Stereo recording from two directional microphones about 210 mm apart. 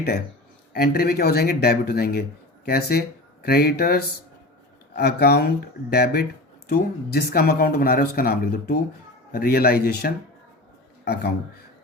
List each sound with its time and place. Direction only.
0.7 s speech: 45° left (ahead or behind)